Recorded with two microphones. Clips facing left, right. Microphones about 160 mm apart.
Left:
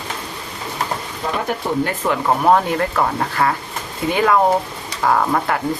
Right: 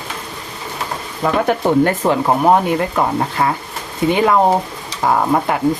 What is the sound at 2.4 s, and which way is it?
Speech, 20° right (ahead or behind).